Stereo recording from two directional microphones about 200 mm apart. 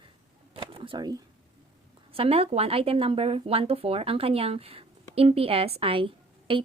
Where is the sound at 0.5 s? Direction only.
25° right (ahead or behind).